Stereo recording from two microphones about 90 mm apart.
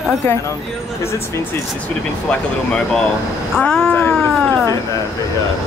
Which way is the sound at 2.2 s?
10° left (ahead or behind).